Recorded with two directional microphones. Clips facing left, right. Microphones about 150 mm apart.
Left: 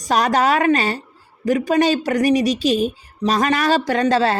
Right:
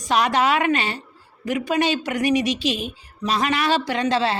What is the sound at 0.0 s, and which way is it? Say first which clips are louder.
A woman's voice: left 2 dB; 40° left (ahead or behind).